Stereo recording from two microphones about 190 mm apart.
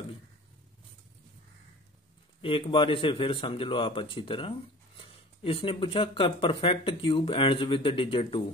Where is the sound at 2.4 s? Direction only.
25° left (ahead or behind).